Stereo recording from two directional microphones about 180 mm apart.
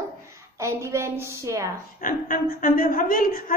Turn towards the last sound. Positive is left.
turn(degrees=50)  # may be behind; listen again after turning